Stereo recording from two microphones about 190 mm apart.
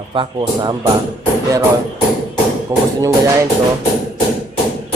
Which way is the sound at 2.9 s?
15° right (ahead or behind).